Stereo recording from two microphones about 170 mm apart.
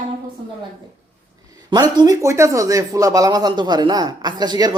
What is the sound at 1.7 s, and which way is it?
Speech, 25° right (ahead or behind).